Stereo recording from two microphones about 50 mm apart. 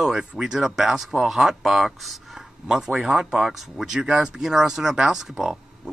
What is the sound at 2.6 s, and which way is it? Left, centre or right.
Speech, centre.